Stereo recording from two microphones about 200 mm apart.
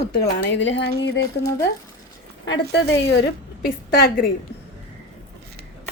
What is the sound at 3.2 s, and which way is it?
A woman's voice, 50° left (ahead or behind).